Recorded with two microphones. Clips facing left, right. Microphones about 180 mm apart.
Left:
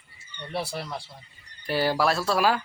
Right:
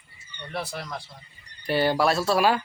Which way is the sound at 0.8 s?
30° left (ahead or behind).